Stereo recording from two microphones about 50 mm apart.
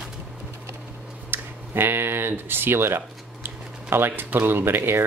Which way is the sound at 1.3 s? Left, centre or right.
Right.